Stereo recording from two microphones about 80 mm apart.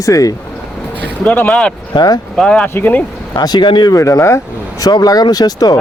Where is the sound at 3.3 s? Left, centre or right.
Left.